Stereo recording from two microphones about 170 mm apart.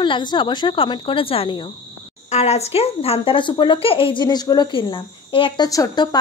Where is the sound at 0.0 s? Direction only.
25° left (ahead or behind).